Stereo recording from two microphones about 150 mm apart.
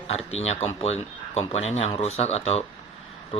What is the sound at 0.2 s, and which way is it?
Speech, 45° left (ahead or behind).